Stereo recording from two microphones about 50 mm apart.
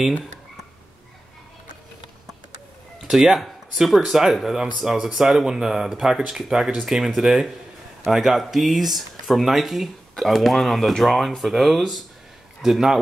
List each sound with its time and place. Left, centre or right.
3.0 s speech: centre